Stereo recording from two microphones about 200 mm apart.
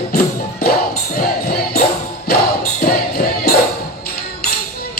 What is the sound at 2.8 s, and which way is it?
Music, 50° left (ahead or behind).